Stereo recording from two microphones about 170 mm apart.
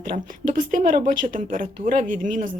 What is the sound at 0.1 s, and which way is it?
Speech, 50° right (ahead or behind).